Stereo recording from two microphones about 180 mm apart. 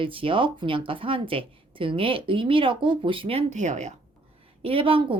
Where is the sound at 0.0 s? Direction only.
30° right (ahead or behind).